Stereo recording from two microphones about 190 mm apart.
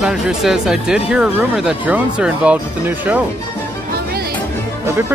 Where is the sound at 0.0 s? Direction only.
5° right (ahead or behind).